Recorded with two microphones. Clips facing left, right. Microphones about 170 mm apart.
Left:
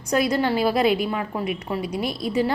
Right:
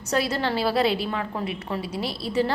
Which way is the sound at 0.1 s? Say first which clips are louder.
Left 4 dB; 15° left (ahead or behind).